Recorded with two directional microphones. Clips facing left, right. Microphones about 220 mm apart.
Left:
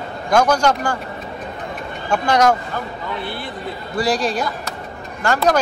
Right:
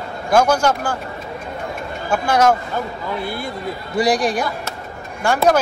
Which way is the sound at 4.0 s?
15° right (ahead or behind).